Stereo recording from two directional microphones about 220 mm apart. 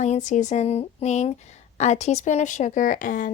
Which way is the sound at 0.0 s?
30° left (ahead or behind).